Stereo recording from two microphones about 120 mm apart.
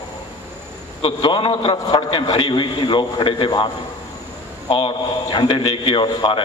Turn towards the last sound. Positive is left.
turn(degrees=40)  # may be behind; listen again after turning